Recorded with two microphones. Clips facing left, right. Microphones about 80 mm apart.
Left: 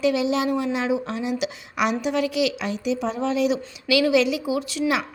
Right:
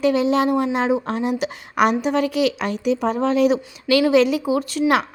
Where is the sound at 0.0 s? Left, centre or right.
Right.